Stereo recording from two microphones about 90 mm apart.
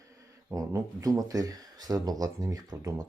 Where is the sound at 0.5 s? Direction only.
35° right (ahead or behind).